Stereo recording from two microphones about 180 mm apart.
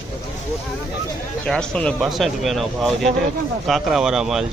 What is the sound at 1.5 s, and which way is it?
Speech, 5° left (ahead or behind).